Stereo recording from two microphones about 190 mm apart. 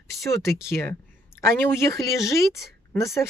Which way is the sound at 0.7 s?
15° left (ahead or behind).